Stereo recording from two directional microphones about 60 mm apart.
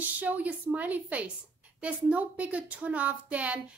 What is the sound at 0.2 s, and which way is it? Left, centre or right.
A woman's voice, right.